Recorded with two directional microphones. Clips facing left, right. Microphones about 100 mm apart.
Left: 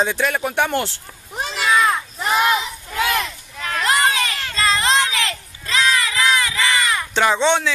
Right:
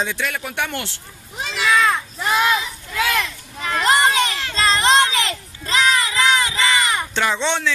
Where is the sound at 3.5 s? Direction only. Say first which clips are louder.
Right 2 dB; 25° right (ahead or behind).